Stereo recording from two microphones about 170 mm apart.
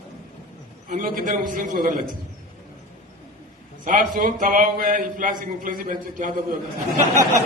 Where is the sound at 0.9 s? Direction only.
55° right (ahead or behind).